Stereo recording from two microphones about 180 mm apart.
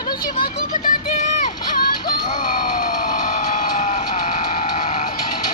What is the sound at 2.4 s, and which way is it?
Vehicle, 45° left (ahead or behind).